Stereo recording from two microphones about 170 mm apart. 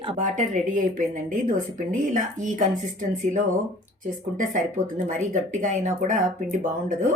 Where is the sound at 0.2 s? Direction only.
45° right (ahead or behind).